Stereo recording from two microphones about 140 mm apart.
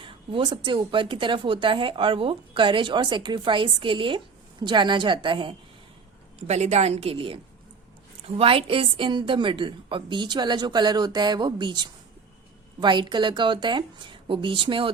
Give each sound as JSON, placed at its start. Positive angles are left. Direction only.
{"t": 0.0, "sound": "a woman's voice", "side_deg": -40}
{"t": 6.5, "sound": "a woman's voice", "side_deg": -55}
{"t": 8.4, "sound": "a woman's voice", "side_deg": -45}
{"t": 12.8, "sound": "a woman's voice", "side_deg": -35}